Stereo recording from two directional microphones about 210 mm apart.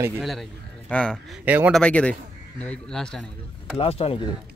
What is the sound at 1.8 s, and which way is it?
Speech, 5° left (ahead or behind).